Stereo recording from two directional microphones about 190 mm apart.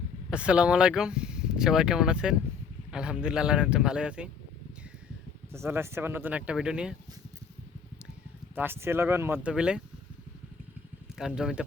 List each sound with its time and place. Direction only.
0.3 s speech: 5° right (ahead or behind)
5.5 s speech: 15° right (ahead or behind)
8.5 s speech: 10° right (ahead or behind)
11.2 s speech: centre (ahead or behind)